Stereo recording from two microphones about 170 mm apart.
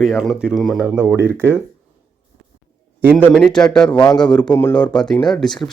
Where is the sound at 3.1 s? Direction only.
10° left (ahead or behind).